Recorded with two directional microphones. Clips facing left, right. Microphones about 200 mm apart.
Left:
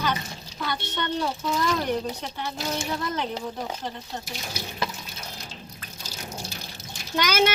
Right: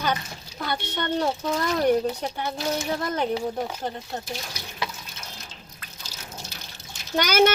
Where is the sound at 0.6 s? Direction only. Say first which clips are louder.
Right 1 dB; 45° right (ahead or behind).